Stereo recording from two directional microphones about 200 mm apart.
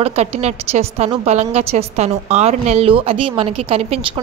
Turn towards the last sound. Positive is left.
turn(degrees=-25)  # may be behind; listen again after turning